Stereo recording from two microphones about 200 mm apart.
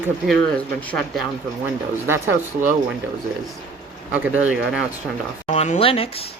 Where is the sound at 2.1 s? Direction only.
10° right (ahead or behind).